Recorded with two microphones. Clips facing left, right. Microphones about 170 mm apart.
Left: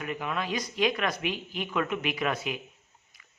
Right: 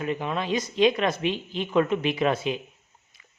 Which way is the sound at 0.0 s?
25° right (ahead or behind).